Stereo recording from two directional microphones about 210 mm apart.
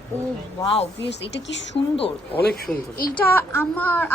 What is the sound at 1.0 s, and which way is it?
Speech, 55° left (ahead or behind).